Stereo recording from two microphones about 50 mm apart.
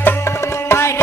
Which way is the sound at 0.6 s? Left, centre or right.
Left.